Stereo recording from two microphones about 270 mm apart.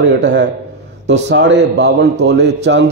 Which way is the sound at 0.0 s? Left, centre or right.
Right.